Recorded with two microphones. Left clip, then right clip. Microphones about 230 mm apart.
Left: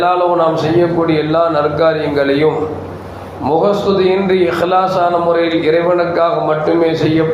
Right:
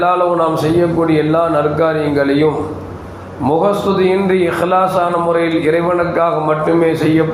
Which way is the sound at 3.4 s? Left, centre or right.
Right.